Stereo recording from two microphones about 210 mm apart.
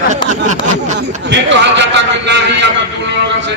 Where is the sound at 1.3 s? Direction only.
60° right (ahead or behind).